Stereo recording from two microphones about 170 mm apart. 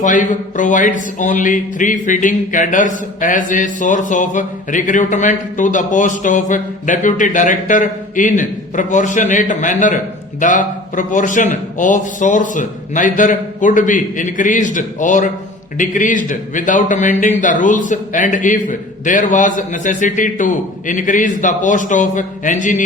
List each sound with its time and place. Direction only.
0.0 s speech: 50° left (ahead or behind)